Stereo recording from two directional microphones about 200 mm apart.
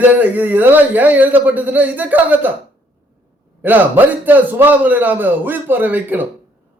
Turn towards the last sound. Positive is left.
turn(degrees=-10)  # may be behind; listen again after turning